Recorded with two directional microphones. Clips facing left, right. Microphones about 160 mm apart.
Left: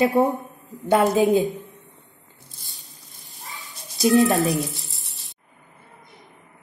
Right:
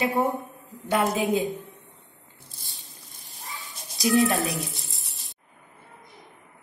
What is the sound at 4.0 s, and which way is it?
Speech, 20° left (ahead or behind).